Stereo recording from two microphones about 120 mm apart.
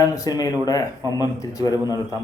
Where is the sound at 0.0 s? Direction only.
30° left (ahead or behind).